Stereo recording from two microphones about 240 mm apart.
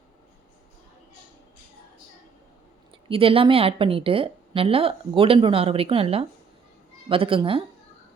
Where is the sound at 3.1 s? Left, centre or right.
Right.